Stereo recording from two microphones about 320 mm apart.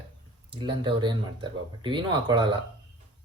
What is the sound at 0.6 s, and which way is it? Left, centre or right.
Speech, centre.